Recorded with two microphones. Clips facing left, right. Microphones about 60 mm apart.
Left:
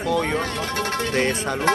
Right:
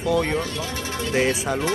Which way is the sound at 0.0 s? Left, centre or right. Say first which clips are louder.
Even; centre.